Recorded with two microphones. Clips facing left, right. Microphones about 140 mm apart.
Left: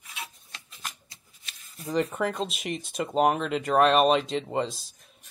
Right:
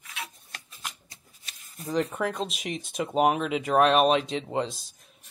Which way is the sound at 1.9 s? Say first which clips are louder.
Left 1 dB; centre (ahead or behind).